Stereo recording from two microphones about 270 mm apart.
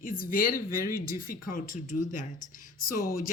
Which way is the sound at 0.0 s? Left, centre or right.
Left.